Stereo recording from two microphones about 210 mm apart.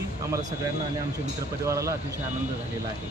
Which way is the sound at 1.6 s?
15° right (ahead or behind).